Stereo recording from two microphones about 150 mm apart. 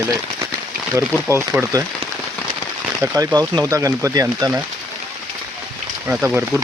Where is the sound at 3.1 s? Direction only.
25° right (ahead or behind).